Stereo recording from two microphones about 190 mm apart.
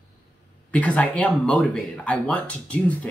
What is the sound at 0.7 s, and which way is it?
Speech, 5° left (ahead or behind).